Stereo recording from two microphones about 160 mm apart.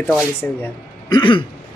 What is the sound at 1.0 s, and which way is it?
Throat clearing, 25° left (ahead or behind).